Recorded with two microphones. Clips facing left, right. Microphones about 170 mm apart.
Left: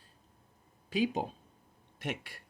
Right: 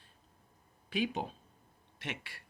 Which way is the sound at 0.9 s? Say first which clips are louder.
Left 3 dB; 40° left (ahead or behind).